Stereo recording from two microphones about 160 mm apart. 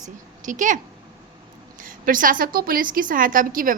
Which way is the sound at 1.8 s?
60° right (ahead or behind).